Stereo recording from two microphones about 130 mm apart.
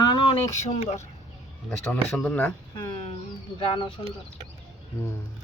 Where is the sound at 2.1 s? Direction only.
10° left (ahead or behind).